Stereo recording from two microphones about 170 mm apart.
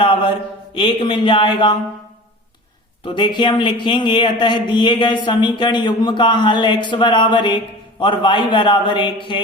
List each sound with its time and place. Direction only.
0.0 s a man's voice: 30° left (ahead or behind)
3.0 s a man's voice: 30° left (ahead or behind)